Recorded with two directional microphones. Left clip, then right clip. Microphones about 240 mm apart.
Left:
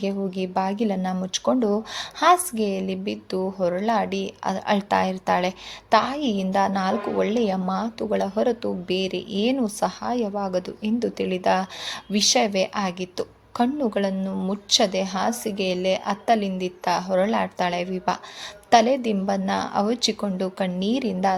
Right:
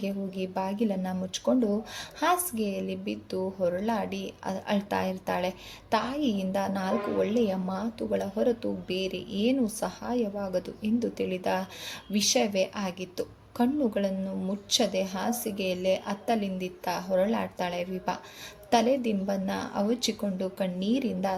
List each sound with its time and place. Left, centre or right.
0.0 s speech: centre